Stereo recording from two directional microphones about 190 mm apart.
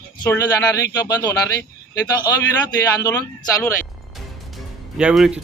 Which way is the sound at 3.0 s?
15° left (ahead or behind).